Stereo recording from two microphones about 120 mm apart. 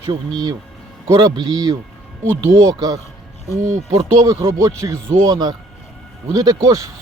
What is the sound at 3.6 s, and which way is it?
Speech, 65° right (ahead or behind).